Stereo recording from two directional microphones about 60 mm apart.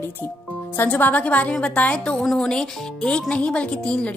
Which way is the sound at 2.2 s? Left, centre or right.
Centre.